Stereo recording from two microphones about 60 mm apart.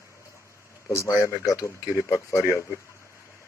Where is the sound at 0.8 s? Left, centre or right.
Left.